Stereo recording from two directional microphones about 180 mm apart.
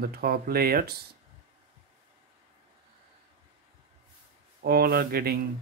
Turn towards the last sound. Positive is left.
turn(degrees=-55)  # may be behind; listen again after turning